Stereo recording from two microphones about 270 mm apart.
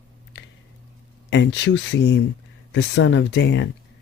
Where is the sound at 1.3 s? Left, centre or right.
Left.